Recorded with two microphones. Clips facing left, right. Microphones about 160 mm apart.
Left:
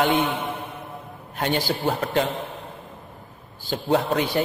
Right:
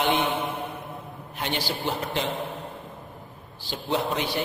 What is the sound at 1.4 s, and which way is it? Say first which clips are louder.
Speech: left 5 dB; 50° left (ahead or behind).